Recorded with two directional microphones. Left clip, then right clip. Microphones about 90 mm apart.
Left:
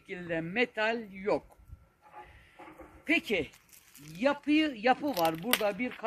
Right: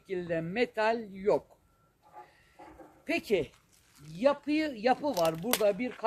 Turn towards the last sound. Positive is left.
turn(degrees=-40)  # may be behind; listen again after turning